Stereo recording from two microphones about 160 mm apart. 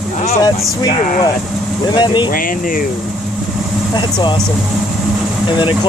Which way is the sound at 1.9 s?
30° left (ahead or behind).